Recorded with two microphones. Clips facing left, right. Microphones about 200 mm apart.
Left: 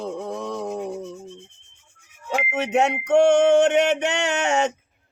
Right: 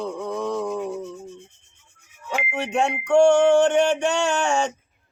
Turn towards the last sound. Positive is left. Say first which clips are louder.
# even
turn(degrees=20)  # may be behind; listen again after turning